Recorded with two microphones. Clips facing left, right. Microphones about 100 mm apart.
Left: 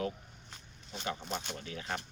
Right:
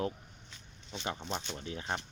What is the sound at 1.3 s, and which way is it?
Speech, 50° left (ahead or behind).